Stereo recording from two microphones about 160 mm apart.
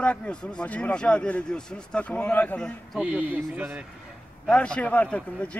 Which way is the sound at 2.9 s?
10° right (ahead or behind).